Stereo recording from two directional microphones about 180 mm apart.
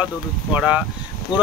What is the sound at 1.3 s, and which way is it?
Speech, 25° left (ahead or behind).